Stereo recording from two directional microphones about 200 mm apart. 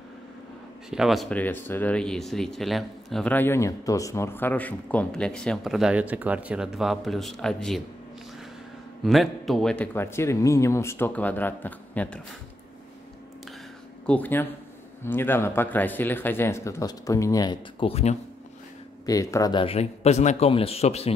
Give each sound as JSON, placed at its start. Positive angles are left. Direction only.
{"t": 0.8, "sound": "speech", "side_deg": 0}
{"t": 9.0, "sound": "speech", "side_deg": 0}
{"t": 14.0, "sound": "speech", "side_deg": 10}
{"t": 19.0, "sound": "speech", "side_deg": 15}